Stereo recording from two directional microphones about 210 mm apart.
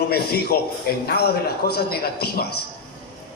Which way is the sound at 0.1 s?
50° left (ahead or behind).